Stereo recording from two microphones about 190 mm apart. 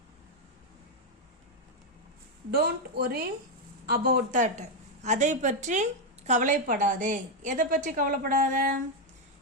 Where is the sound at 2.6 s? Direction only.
55° right (ahead or behind).